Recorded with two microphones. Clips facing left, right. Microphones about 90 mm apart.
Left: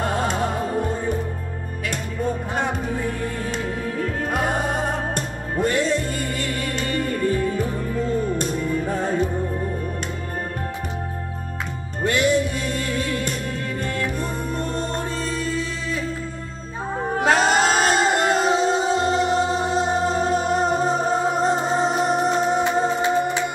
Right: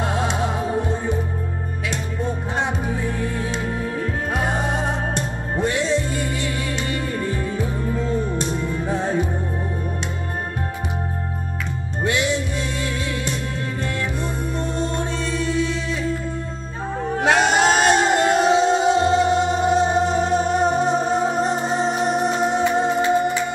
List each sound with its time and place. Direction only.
0.0 s music: 50° left (ahead or behind)
4.6 s music: 50° left (ahead or behind)
8.8 s music: 50° left (ahead or behind)
12.0 s music: 45° left (ahead or behind)
14.2 s music: 50° left (ahead or behind)
17.2 s music: 40° left (ahead or behind)
22.6 s music: 20° left (ahead or behind)